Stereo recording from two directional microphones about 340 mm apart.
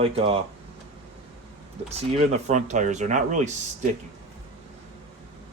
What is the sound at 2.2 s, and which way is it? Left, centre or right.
Speech, centre.